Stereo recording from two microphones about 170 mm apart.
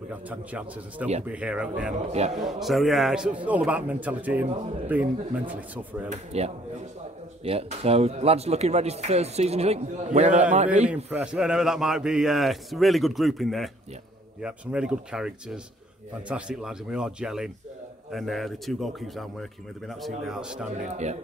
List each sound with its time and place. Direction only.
0.1 s a man's voice: 10° right (ahead or behind)
6.0 s a man's voice: 40° right (ahead or behind)
11.1 s a man's voice: 10° right (ahead or behind)
20.8 s speech: 40° right (ahead or behind)